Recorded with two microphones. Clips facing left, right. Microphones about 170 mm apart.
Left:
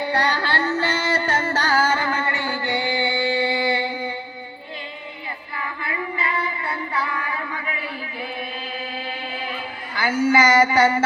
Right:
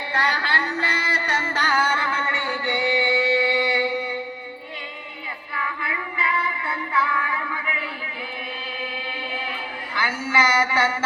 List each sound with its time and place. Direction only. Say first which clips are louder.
0.1 s music: right 1 dB; 40° left (ahead or behind)
5.5 s music: left 1 dB; 30° left (ahead or behind)
8.8 s chant: left 1 dB; 40° left (ahead or behind)
9.9 s speech: left 7 dB; 40° left (ahead or behind)